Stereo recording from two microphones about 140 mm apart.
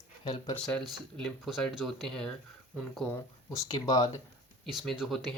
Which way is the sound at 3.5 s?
25° left (ahead or behind).